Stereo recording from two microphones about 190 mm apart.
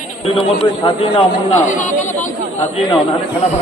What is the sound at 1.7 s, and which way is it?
Speech, 40° left (ahead or behind).